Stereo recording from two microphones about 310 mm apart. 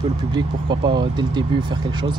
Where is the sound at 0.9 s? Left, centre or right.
Centre.